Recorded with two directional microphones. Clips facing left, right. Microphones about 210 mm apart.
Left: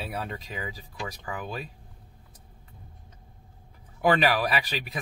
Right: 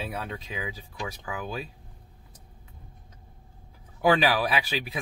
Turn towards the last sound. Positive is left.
turn(degrees=0)  # may be behind; listen again after turning